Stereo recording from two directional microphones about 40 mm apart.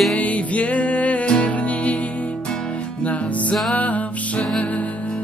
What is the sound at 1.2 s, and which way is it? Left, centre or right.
Music, left.